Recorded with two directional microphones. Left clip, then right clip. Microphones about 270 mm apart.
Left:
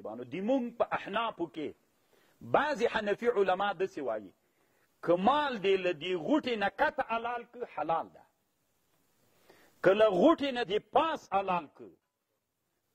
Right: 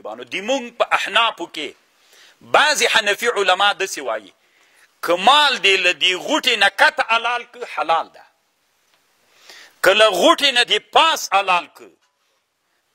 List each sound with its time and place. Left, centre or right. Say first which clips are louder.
0.1 s a man's voice: right 10 dB; centre
2.5 s a man's voice: right 14 dB; centre
9.5 s a man's voice: right 11 dB; centre